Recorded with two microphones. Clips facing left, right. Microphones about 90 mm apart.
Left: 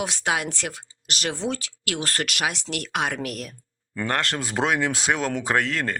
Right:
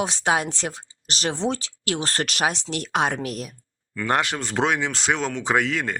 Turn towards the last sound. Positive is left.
turn(degrees=-5)  # may be behind; listen again after turning